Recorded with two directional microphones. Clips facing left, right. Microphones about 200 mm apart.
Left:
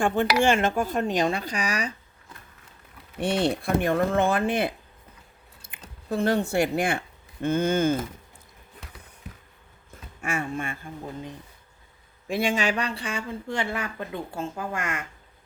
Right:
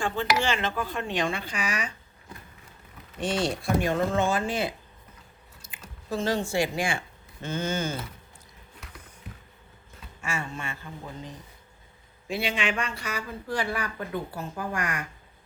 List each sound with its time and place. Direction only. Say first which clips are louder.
0.4 s speech: left 6 dB; 50° left (ahead or behind)
3.2 s speech: left 3 dB; 60° left (ahead or behind)
6.1 s speech: left 3 dB; 60° left (ahead or behind)
10.2 s speech: left 5 dB; 55° left (ahead or behind)
12.3 s speech: left 4 dB; 50° left (ahead or behind); by 15.0 s 25° left (ahead or behind)